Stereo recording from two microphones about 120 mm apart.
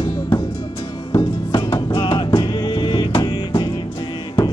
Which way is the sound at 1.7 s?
45° left (ahead or behind).